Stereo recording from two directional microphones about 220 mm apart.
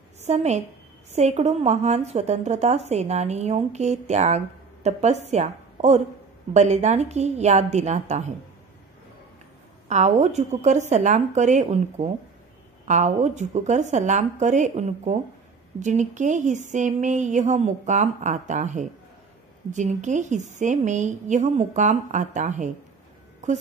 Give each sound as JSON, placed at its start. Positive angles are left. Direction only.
{"t": 0.2, "sound": "a woman's voice", "side_deg": -30}
{"t": 9.8, "sound": "a woman's voice", "side_deg": -30}